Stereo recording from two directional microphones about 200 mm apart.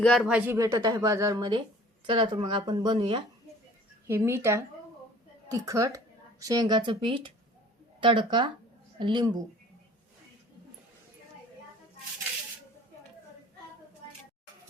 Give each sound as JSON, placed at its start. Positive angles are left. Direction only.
{"t": 0.0, "sound": "a woman's voice", "side_deg": 0}
{"t": 4.0, "sound": "a woman's voice", "side_deg": -10}